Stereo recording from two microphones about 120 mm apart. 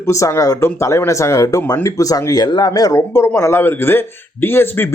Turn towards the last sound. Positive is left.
turn(degrees=20)  # may be behind; listen again after turning